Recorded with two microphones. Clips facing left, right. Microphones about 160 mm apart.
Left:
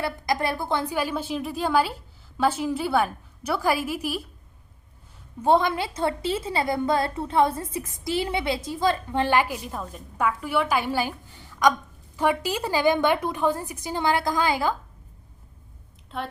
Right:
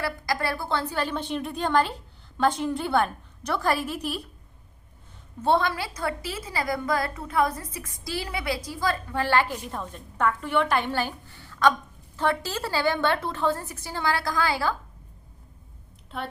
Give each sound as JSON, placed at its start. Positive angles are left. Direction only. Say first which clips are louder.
{"t": 0.0, "sound": "a woman's voice", "louder": "left 2 dB", "side_deg": 20}
{"t": 5.4, "sound": "a woman's voice", "louder": "left 3 dB", "side_deg": 15}
{"t": 16.1, "sound": "speech", "louder": "left 2 dB", "side_deg": 0}